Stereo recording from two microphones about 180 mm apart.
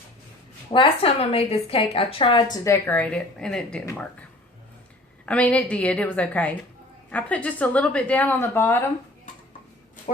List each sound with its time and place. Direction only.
0.7 s a woman's voice: 30° left (ahead or behind)
2.6 s speech: 10° left (ahead or behind)
5.2 s speech: 5° left (ahead or behind)